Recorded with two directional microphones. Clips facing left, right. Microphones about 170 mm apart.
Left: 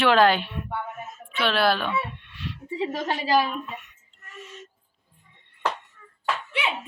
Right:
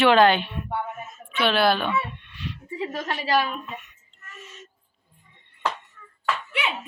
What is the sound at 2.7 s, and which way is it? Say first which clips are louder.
Speech: left 3 dB; 25° left (ahead or behind).